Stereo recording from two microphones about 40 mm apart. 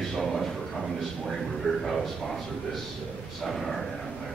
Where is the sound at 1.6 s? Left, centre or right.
Left.